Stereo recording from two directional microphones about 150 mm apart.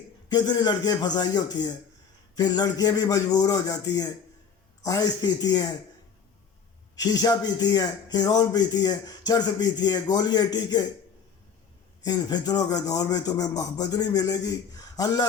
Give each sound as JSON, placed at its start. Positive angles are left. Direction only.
{"t": 0.3, "sound": "speech", "side_deg": 25}
{"t": 6.9, "sound": "speech", "side_deg": 25}
{"t": 12.0, "sound": "speech", "side_deg": 25}